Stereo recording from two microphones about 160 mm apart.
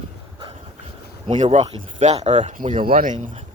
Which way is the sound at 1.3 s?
45° right (ahead or behind).